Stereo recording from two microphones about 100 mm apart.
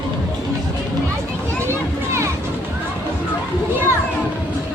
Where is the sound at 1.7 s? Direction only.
25° right (ahead or behind).